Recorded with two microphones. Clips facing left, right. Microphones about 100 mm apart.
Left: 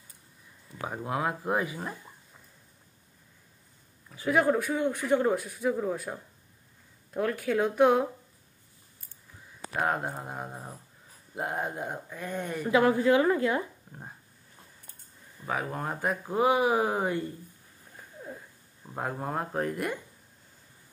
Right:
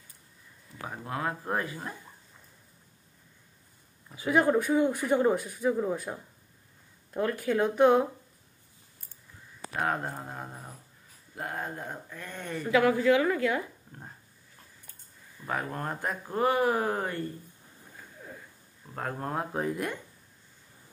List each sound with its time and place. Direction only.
0.7 s speech: 15° left (ahead or behind)
4.3 s speech: centre (ahead or behind)
7.2 s speech: centre (ahead or behind)
9.8 s speech: 5° left (ahead or behind)
10.2 s a woman's voice: 20° left (ahead or behind)
12.7 s a woman's voice: 30° left (ahead or behind)
15.4 s speech: 5° left (ahead or behind)
18.9 s speech: 10° left (ahead or behind)